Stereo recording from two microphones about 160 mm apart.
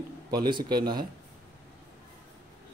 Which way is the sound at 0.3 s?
30° right (ahead or behind).